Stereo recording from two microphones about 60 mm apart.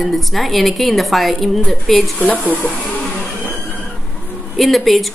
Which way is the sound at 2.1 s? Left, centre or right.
Left.